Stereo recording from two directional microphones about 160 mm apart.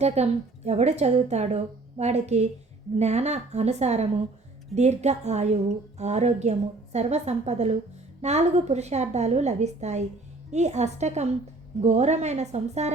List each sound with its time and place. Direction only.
0.0 s a woman's voice: 40° right (ahead or behind)